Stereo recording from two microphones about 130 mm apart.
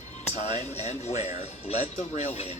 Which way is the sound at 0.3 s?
60° left (ahead or behind).